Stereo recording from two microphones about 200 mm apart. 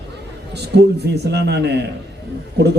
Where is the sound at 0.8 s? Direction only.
55° right (ahead or behind).